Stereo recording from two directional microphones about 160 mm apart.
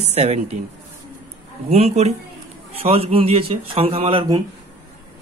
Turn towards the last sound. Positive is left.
turn(degrees=-35)  # may be behind; listen again after turning